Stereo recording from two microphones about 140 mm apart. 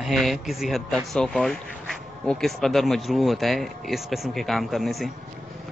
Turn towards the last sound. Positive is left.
turn(degrees=0)  # may be behind; listen again after turning